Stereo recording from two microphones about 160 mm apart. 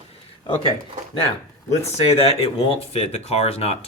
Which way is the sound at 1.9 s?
40° left (ahead or behind).